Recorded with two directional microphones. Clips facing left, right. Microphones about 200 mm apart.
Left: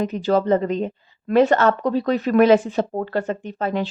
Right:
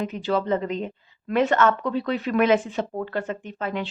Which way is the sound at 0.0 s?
40° left (ahead or behind).